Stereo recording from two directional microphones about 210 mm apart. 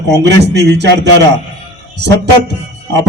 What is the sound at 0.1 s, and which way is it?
A man's voice, 55° right (ahead or behind).